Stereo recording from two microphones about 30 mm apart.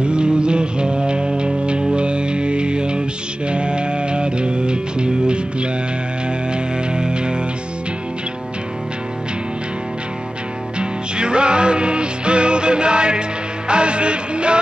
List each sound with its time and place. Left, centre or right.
0.0 s music: right
10.8 s music: right